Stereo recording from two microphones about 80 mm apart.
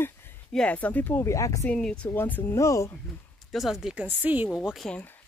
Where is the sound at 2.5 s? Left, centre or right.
Left.